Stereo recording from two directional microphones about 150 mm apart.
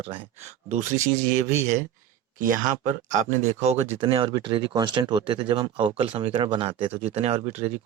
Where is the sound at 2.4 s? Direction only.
60° right (ahead or behind).